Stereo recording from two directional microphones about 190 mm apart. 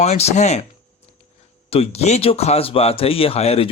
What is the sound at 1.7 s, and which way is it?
Speech, 30° left (ahead or behind).